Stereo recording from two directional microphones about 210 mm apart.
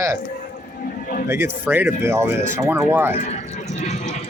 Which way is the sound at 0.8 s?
45° left (ahead or behind).